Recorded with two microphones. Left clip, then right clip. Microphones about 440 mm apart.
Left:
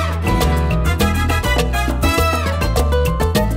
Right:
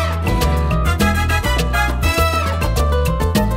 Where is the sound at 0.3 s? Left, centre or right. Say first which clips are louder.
Left 4 dB; left.